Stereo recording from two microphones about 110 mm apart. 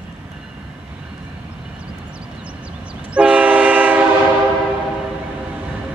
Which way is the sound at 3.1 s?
10° right (ahead or behind).